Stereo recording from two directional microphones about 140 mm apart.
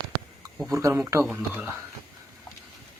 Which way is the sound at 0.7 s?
20° right (ahead or behind).